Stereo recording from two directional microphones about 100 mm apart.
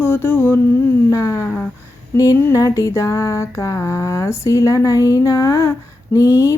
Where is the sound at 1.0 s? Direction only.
30° left (ahead or behind).